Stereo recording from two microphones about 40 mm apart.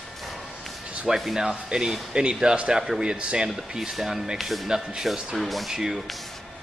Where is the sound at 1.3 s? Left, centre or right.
Centre.